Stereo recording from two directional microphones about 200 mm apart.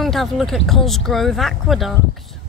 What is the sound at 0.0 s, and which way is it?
Speech, centre (ahead or behind).